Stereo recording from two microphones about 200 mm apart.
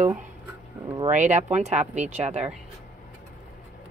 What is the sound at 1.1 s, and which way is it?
Speech, 35° right (ahead or behind).